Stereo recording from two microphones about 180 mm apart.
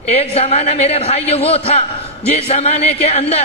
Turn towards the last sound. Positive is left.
turn(degrees=35)  # may be behind; listen again after turning